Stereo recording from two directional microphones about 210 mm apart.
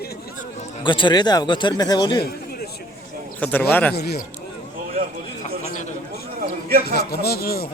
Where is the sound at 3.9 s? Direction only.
50° left (ahead or behind).